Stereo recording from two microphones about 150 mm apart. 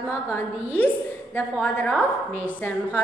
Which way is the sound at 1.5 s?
10° left (ahead or behind).